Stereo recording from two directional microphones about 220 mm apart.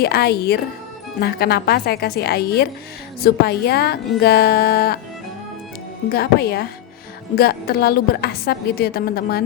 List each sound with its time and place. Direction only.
0.0 s a woman's voice: 45° left (ahead or behind)
6.1 s a woman's voice: 45° left (ahead or behind)